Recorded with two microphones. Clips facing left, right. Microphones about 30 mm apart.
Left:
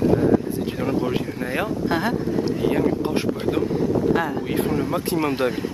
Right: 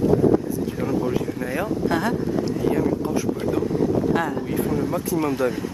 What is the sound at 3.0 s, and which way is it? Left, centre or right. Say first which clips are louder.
Speech: left 1 dB; left.